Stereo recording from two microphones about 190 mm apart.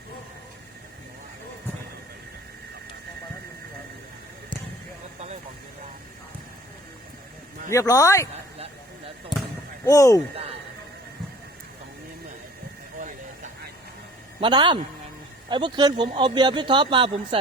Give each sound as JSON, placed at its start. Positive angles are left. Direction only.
{"t": 7.7, "sound": "speech", "side_deg": 15}
{"t": 9.3, "sound": "basketball bounce", "side_deg": 25}
{"t": 9.8, "sound": "speech", "side_deg": 15}
{"t": 14.4, "sound": "speech", "side_deg": -25}